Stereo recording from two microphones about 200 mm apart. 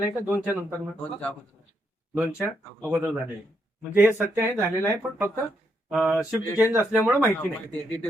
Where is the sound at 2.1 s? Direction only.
10° right (ahead or behind).